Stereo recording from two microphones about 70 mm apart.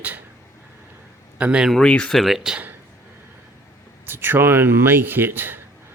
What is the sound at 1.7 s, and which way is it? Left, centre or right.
Speech, centre.